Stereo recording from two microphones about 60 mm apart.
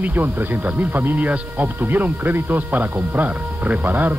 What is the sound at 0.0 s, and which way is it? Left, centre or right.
Speech, right.